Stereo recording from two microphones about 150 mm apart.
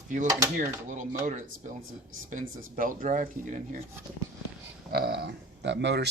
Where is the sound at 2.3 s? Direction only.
65° right (ahead or behind).